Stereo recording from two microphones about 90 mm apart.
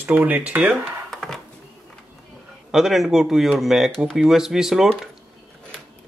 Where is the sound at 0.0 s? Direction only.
20° right (ahead or behind).